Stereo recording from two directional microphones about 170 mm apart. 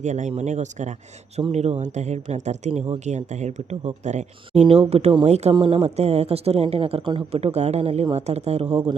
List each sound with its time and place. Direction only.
0.0 s speech: 45° right (ahead or behind)
5.5 s speech: 25° right (ahead or behind)
5.8 s speech: 40° right (ahead or behind)